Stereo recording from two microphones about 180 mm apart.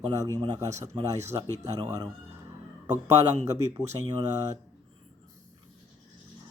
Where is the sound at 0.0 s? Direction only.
20° right (ahead or behind).